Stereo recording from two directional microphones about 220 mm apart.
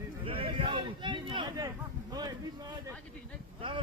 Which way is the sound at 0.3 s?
25° right (ahead or behind).